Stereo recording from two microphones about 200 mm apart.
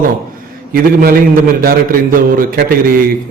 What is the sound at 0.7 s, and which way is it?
A man's voice, 50° right (ahead or behind).